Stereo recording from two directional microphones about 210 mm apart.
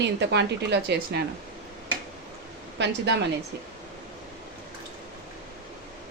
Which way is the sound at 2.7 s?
55° right (ahead or behind).